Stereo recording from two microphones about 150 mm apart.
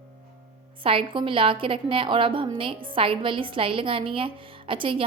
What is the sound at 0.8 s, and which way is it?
A woman's voice, 35° right (ahead or behind).